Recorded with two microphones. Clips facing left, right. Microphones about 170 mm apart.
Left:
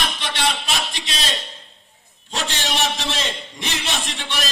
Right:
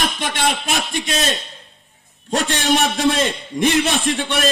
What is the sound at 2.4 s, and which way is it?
A man's voice, 55° right (ahead or behind).